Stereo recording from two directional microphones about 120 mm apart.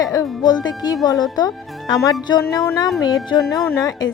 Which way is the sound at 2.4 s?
20° left (ahead or behind).